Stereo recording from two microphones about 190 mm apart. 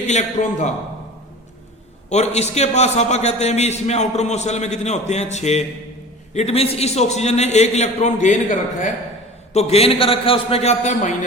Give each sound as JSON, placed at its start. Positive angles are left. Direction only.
{"t": 0.1, "sound": "a man's voice", "side_deg": 40}
{"t": 2.0, "sound": "a man's voice", "side_deg": 35}